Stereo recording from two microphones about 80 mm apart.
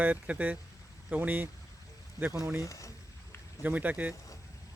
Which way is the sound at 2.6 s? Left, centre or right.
Left.